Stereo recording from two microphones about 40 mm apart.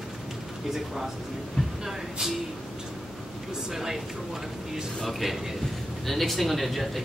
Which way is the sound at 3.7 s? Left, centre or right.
Centre.